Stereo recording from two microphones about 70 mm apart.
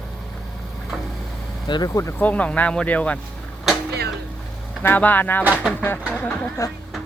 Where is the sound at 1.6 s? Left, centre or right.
Left.